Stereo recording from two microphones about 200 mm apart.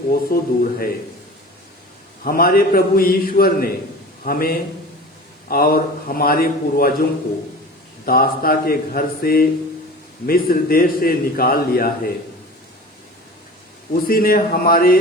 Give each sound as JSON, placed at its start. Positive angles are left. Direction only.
{"t": 0.1, "sound": "a man's voice", "side_deg": 45}
{"t": 2.2, "sound": "a man's voice", "side_deg": 45}
{"t": 8.0, "sound": "a man's voice", "side_deg": 45}
{"t": 14.1, "sound": "a man's voice", "side_deg": 45}